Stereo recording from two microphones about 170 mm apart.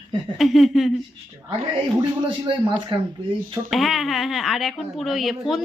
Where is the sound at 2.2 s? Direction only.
30° right (ahead or behind).